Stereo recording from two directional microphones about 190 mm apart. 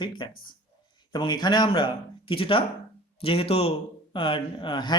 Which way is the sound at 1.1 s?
25° left (ahead or behind).